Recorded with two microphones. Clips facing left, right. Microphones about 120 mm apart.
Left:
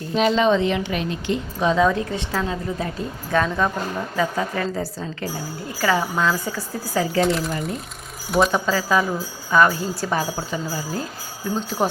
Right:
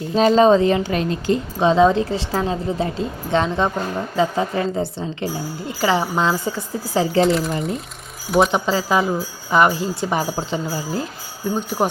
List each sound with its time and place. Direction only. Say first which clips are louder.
0.2 s a woman's voice: right 5 dB; 40° right (ahead or behind)
7.3 s speech: right 3 dB; centre (ahead or behind)
8.5 s a woman's voice: right 2 dB; 20° right (ahead or behind)